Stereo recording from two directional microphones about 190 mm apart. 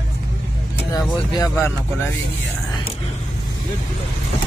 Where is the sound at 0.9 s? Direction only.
20° left (ahead or behind).